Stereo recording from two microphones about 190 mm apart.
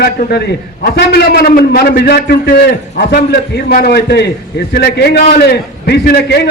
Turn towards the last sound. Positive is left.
turn(degrees=60)  # may be behind; listen again after turning